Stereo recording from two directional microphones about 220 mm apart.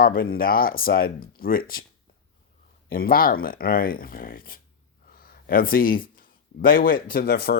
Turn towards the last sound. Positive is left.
turn(degrees=45)  # may be behind; listen again after turning